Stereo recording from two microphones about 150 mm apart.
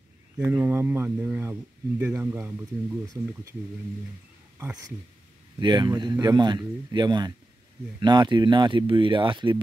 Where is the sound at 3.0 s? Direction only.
25° right (ahead or behind).